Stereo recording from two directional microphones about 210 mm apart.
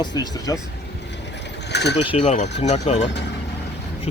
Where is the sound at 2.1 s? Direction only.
30° left (ahead or behind).